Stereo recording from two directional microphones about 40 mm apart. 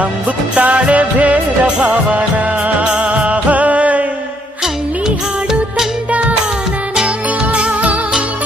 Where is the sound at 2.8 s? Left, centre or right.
Right.